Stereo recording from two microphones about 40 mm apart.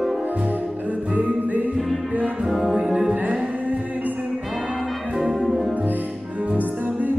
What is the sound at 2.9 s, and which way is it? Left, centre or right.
Music, centre.